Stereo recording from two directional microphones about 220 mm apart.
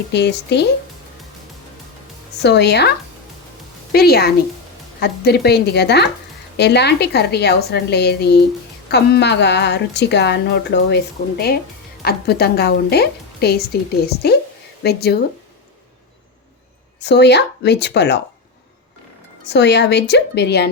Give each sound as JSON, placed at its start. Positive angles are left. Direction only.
{"t": 0.1, "sound": "a woman's voice", "side_deg": 50}
{"t": 2.4, "sound": "a woman's voice", "side_deg": 50}
{"t": 3.9, "sound": "a woman's voice", "side_deg": 45}
{"t": 17.0, "sound": "a woman's voice", "side_deg": 50}
{"t": 19.5, "sound": "a woman's voice", "side_deg": 50}